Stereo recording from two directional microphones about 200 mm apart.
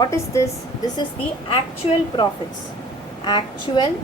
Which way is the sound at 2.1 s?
25° left (ahead or behind).